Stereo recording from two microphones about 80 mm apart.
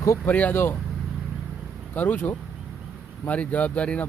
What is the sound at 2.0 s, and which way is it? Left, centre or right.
Speech, left.